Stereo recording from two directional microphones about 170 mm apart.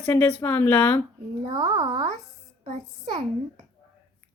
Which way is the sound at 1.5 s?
25° right (ahead or behind).